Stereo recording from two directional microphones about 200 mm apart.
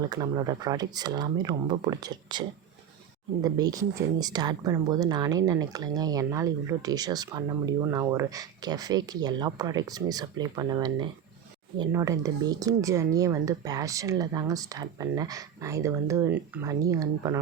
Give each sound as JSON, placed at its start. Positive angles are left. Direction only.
{"t": 0.1, "sound": "speech", "side_deg": -20}
{"t": 3.4, "sound": "speech", "side_deg": -20}